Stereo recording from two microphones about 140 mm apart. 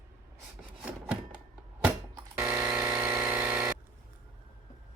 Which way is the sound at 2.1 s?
15° right (ahead or behind).